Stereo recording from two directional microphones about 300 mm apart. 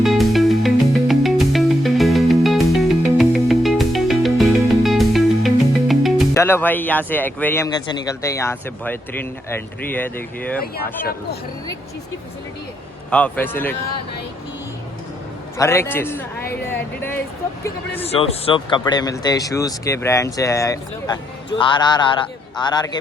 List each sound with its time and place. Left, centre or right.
0.0 s music: centre
5.9 s speech: centre
11.0 s speech: left
13.1 s a man's voice: centre
15.5 s speech: centre
18.0 s speech: centre